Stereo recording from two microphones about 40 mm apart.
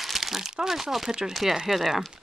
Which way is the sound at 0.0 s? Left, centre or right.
Centre.